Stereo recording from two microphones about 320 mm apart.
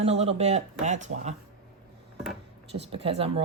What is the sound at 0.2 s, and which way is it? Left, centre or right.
Speech, centre.